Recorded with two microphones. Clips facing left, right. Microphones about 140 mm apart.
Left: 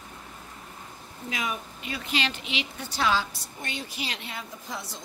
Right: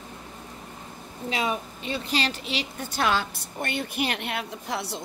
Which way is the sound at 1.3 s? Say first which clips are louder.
Right 5 dB; 30° right (ahead or behind).